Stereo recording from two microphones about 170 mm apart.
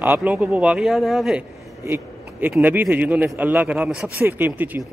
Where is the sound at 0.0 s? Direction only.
10° right (ahead or behind).